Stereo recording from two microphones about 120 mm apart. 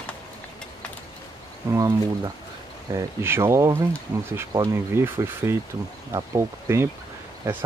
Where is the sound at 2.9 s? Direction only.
20° right (ahead or behind).